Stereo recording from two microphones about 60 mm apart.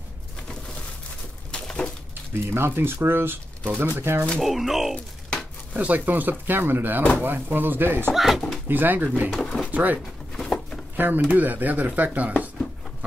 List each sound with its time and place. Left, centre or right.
1.5 s a sound: centre
2.4 s speech: right
4.4 s speech: centre
5.7 s speech: right
8.1 s speech: centre
8.6 s speech: right
9.7 s pigeon: right
10.3 s a sound: centre
11.0 s speech: right